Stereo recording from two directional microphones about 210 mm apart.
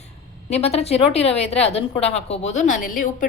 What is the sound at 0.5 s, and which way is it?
A woman's voice, 30° left (ahead or behind).